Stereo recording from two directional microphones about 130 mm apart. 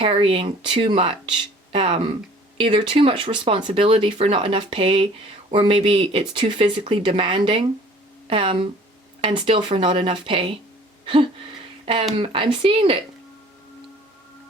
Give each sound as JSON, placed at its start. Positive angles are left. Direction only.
{"t": 0.0, "sound": "speech", "side_deg": -45}
{"t": 11.0, "sound": "a sound", "side_deg": -40}
{"t": 12.1, "sound": "speech", "side_deg": -45}